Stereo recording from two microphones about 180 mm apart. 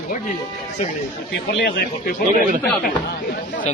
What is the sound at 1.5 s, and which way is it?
Speech, 70° left (ahead or behind).